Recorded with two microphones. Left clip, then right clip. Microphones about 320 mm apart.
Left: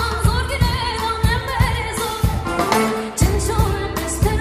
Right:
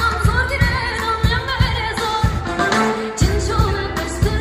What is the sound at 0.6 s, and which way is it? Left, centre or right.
Music, centre.